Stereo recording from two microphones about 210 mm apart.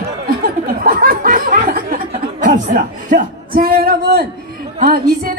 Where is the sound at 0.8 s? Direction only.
45° right (ahead or behind).